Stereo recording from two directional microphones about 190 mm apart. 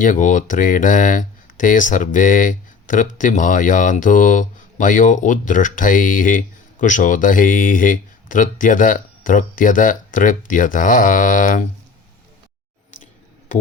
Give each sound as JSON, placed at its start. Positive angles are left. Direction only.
{"t": 0.0, "sound": "speech", "side_deg": 40}